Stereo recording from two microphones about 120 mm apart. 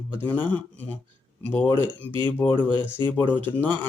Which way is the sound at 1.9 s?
40° right (ahead or behind).